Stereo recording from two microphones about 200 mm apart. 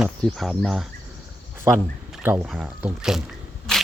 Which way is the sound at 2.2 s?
10° right (ahead or behind).